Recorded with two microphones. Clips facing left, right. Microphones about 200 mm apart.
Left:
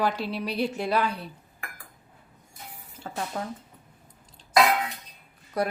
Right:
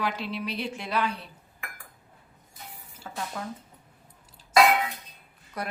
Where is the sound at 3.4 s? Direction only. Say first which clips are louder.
Left 3 dB; 35° left (ahead or behind).